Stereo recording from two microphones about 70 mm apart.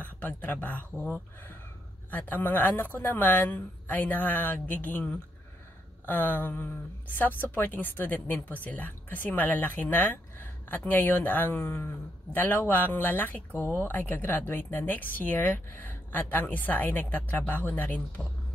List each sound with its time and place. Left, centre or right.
0.0 s speech: left